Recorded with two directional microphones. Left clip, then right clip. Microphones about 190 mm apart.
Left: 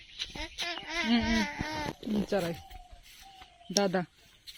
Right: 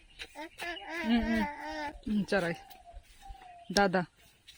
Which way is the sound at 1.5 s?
20° right (ahead or behind).